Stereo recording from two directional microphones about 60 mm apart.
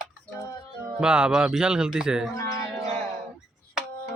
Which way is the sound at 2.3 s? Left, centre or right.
Left.